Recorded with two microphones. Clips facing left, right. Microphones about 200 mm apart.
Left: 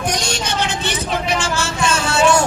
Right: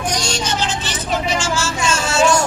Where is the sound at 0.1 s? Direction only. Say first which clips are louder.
Even; 60° left (ahead or behind).